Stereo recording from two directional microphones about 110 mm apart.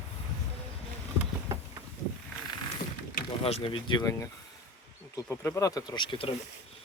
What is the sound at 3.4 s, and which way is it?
Speech, 65° left (ahead or behind).